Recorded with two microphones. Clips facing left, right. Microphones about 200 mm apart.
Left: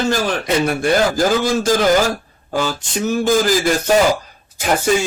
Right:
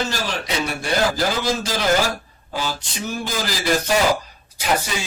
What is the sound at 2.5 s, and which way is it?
Speech, 50° left (ahead or behind).